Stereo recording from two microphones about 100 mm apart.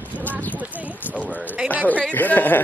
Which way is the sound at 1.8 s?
15° left (ahead or behind).